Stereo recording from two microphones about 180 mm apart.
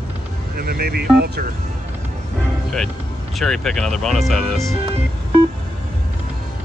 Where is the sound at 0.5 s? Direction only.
55° right (ahead or behind).